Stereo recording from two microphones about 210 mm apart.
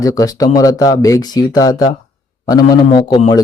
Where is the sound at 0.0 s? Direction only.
15° left (ahead or behind).